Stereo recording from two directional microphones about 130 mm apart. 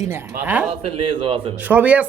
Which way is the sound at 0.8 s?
45° right (ahead or behind).